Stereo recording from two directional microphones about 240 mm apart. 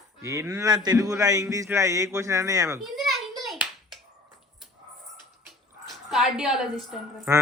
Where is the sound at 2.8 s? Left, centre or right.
Centre.